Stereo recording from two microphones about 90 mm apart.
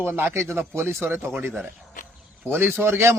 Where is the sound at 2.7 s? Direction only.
30° right (ahead or behind).